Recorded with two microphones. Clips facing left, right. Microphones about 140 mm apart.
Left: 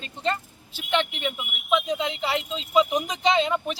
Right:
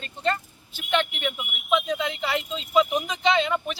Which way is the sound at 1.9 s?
25° left (ahead or behind).